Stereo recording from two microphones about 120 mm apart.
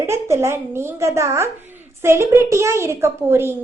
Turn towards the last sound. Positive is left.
turn(degrees=-20)  # may be behind; listen again after turning